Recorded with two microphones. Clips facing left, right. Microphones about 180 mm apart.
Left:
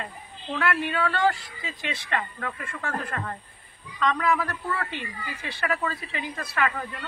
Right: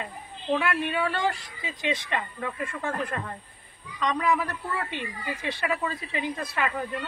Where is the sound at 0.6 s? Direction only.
10° right (ahead or behind).